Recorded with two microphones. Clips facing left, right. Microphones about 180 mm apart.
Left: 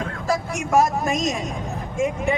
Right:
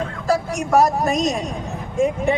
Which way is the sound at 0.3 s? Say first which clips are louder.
Right 4 dB; 35° right (ahead or behind).